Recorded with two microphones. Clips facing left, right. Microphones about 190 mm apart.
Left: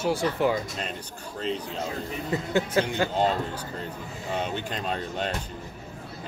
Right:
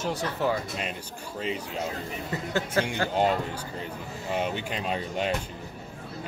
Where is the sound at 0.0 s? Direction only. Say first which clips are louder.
Left 4 dB; 10° left (ahead or behind).